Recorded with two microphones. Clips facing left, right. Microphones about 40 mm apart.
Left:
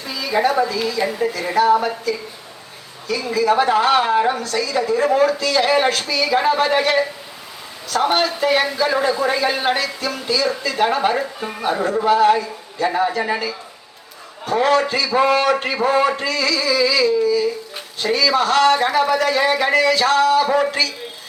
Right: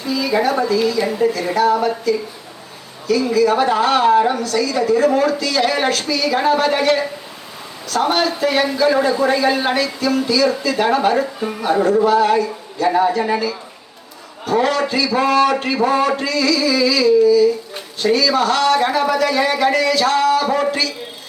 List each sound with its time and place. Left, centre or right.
0.1 s a man's voice: centre
6.3 s a man's voice: centre
10.2 s music: centre
10.7 s a man's voice: centre
12.0 s a man's voice: centre
12.9 s a man's voice: centre
14.7 s music: left
15.1 s a man's voice: centre
16.2 s music: left
16.6 s a man's voice: centre